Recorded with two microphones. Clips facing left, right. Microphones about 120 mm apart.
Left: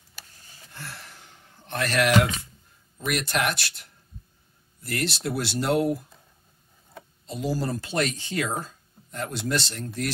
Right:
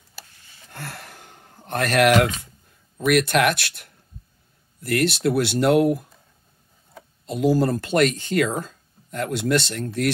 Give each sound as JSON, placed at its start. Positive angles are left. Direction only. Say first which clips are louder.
{"t": 0.7, "sound": "a sound", "louder": "right 5 dB", "side_deg": -60}
{"t": 3.1, "sound": "speech", "louder": "right 8 dB", "side_deg": -70}
{"t": 7.2, "sound": "speech", "louder": "right 9 dB", "side_deg": -60}